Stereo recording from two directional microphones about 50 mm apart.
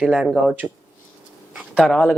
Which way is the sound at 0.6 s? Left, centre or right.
Centre.